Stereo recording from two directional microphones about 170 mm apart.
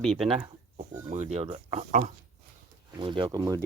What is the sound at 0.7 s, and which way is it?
Speech, 45° right (ahead or behind).